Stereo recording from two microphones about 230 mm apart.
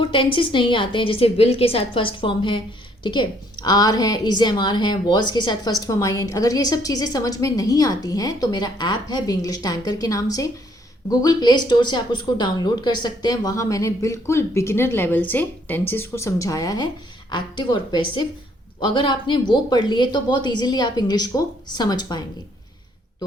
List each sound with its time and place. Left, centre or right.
0.0 s speech: left